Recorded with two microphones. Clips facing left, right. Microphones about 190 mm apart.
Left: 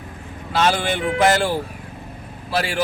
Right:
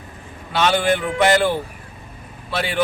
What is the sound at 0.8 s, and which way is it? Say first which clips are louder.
Speech: right 1 dB; centre (ahead or behind).